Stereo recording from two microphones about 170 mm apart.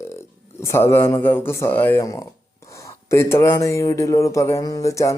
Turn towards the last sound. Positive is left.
turn(degrees=20)  # may be behind; listen again after turning